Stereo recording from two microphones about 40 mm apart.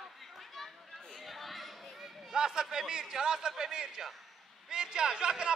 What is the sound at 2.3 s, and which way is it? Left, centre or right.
A man's voice, centre.